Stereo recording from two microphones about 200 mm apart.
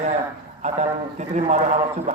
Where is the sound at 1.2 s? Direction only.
35° right (ahead or behind).